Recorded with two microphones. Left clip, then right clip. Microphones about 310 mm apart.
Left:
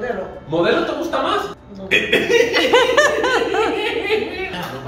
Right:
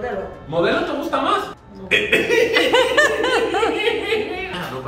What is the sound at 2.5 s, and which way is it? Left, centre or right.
A woman's voice, centre.